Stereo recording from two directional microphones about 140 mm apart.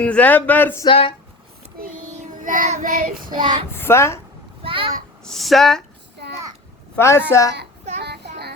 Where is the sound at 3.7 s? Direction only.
15° left (ahead or behind).